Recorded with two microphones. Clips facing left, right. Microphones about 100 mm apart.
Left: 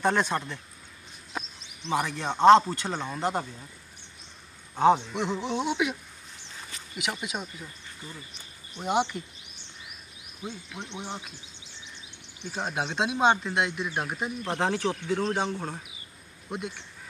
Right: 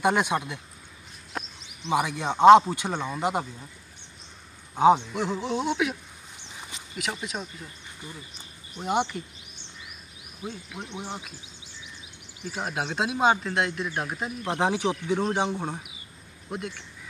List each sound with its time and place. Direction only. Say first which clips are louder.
0.0 s speech: right 2 dB; 15° right (ahead or behind)
1.3 s a sound: right 1 dB; centre (ahead or behind)
1.9 s speech: right 2 dB; 15° right (ahead or behind)
4.7 s speech: right 2 dB; 15° right (ahead or behind)
5.1 s speech: right 1 dB; centre (ahead or behind)
6.5 s a sound: right 1 dB; 20° right (ahead or behind)
7.0 s speech: even; 5° left (ahead or behind)
8.7 s speech: even; centre (ahead or behind)
10.4 s speech: right 1 dB; 10° right (ahead or behind)
12.4 s speech: even; 5° right (ahead or behind)
14.4 s speech: right 3 dB; 15° right (ahead or behind)
16.4 s speech: right 1 dB; centre (ahead or behind)